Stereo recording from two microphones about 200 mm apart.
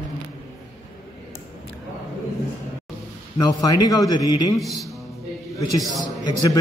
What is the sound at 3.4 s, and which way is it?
A man's voice, 15° left (ahead or behind).